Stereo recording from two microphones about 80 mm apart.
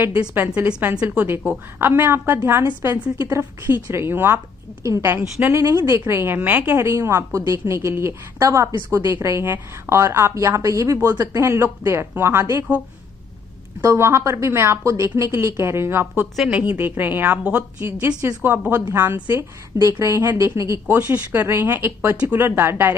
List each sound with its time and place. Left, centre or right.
0.7 s a woman's voice: centre
6.8 s a woman's voice: right
13.8 s a woman's voice: right
20.9 s a woman's voice: right